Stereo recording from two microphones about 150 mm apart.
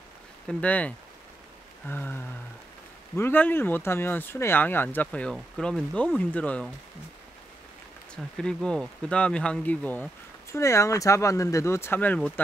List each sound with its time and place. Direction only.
0.5 s speech: 10° left (ahead or behind)
8.4 s speech: 5° left (ahead or behind)